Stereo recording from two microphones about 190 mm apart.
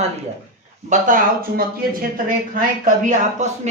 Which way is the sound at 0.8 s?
45° right (ahead or behind).